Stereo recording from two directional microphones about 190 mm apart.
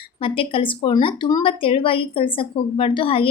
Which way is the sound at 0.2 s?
30° left (ahead or behind).